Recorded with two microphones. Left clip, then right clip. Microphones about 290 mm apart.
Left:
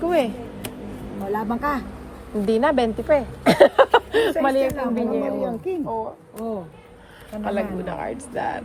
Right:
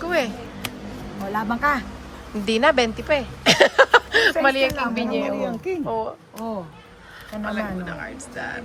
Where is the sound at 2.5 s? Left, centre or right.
Centre.